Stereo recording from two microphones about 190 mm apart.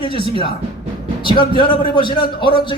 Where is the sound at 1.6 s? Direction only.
25° left (ahead or behind).